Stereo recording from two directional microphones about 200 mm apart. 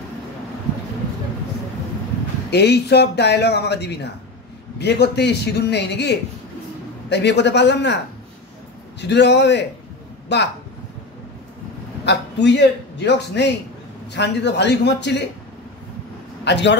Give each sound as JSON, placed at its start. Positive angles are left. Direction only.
{"t": 2.5, "sound": "speech", "side_deg": 55}
{"t": 9.0, "sound": "speech", "side_deg": 60}
{"t": 12.0, "sound": "a man's voice", "side_deg": 60}
{"t": 16.4, "sound": "a man's voice", "side_deg": 60}